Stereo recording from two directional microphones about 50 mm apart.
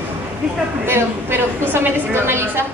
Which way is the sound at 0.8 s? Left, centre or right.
Right.